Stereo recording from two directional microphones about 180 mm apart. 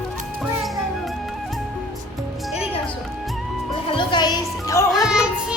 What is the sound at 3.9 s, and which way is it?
Speech, 25° left (ahead or behind).